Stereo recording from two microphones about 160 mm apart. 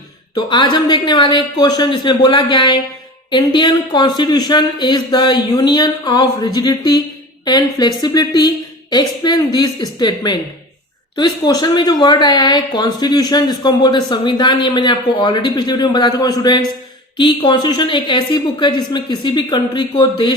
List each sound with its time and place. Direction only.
0.3 s speech: 30° left (ahead or behind)